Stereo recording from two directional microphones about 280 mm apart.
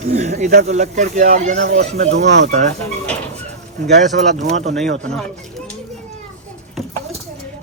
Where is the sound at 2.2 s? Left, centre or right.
Right.